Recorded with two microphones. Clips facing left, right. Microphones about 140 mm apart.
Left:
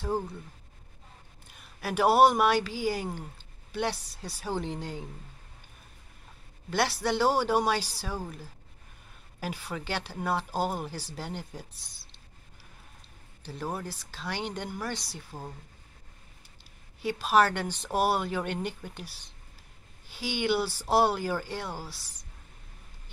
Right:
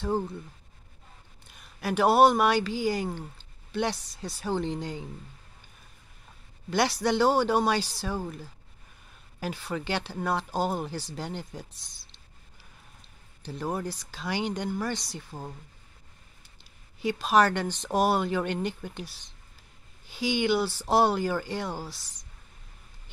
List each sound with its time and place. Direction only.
1.8 s speech: 5° left (ahead or behind)
6.7 s speech: 5° left (ahead or behind)
9.4 s speech: 10° left (ahead or behind)
13.4 s speech: centre (ahead or behind)
17.0 s speech: 5° left (ahead or behind)